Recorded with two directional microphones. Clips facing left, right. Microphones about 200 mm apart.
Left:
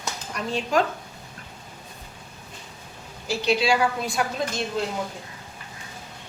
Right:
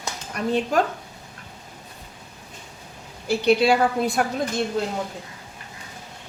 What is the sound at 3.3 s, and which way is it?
Speech, 55° right (ahead or behind).